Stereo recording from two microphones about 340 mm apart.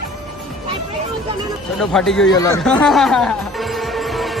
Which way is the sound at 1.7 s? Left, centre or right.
Centre.